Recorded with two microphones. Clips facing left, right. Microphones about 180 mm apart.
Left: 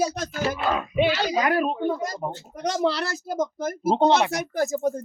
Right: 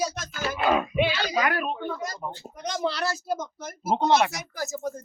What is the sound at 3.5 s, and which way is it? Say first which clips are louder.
Speech: left 5 dB; 55° left (ahead or behind).